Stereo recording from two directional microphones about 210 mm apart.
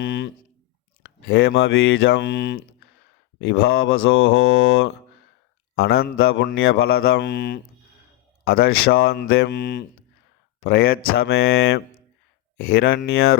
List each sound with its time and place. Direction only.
0.0 s a sound: 55° left (ahead or behind)
1.3 s speech: 70° left (ahead or behind)
6.2 s speech: 60° left (ahead or behind)
8.5 s speech: 75° left (ahead or behind)
9.4 s speech: 55° left (ahead or behind)
11.3 s speech: 75° left (ahead or behind)
12.5 s speech: 50° left (ahead or behind)